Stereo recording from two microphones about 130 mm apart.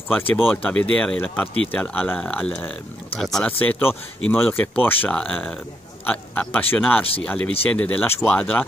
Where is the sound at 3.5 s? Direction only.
15° left (ahead or behind).